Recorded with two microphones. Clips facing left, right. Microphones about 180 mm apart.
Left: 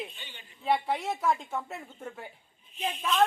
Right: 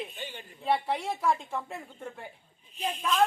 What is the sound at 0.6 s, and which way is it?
Speech, centre (ahead or behind).